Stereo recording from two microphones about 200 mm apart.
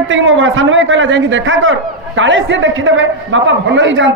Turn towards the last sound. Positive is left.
turn(degrees=-70)  # may be behind; listen again after turning